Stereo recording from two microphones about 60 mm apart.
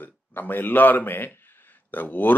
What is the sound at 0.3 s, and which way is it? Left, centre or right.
Speech, left.